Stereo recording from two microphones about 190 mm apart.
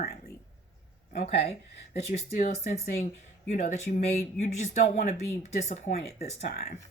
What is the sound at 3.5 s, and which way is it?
Speech, 40° left (ahead or behind).